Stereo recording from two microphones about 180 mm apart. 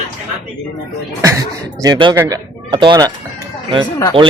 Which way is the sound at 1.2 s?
20° right (ahead or behind).